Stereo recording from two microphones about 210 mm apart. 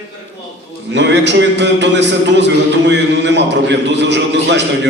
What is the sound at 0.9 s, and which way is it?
A man's voice, 55° right (ahead or behind).